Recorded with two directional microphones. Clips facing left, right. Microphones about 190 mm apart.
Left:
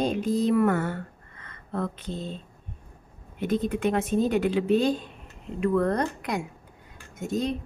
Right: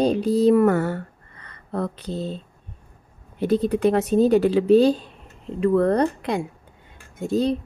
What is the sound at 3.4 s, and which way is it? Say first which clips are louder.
A woman's voice: right 6 dB; 35° right (ahead or behind).